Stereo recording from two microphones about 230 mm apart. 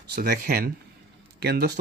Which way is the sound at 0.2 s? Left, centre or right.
Right.